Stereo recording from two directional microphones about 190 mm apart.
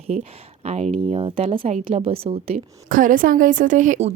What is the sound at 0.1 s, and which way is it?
A woman's voice, 35° right (ahead or behind).